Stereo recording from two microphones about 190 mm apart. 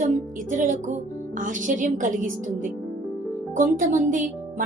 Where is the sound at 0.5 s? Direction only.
40° right (ahead or behind).